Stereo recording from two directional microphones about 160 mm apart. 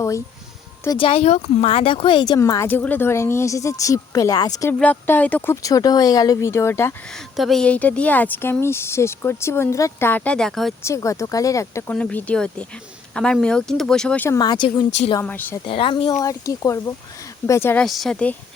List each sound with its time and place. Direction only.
0.9 s speech: 35° left (ahead or behind)
4.8 s speech: 10° left (ahead or behind)
5.6 s speech: 25° left (ahead or behind)
7.1 s speech: centre (ahead or behind)
10.8 s speech: 20° left (ahead or behind)
14.3 s speech: 25° left (ahead or behind)
14.8 s speech: 45° left (ahead or behind)
15.2 s speech: 10° left (ahead or behind)
15.6 s speech: 35° left (ahead or behind)
16.2 s speech: 20° left (ahead or behind)
17.8 s speech: centre (ahead or behind)